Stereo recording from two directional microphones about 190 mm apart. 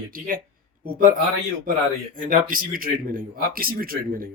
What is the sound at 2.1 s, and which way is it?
Speech, 45° right (ahead or behind).